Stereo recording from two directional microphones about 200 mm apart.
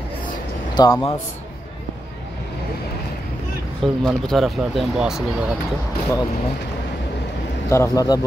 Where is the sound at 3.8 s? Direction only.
25° right (ahead or behind).